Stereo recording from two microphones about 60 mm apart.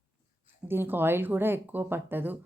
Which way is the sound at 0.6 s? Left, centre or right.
Right.